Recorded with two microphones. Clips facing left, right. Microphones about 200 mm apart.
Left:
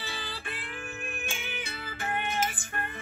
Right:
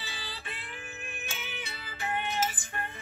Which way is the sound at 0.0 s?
55° left (ahead or behind).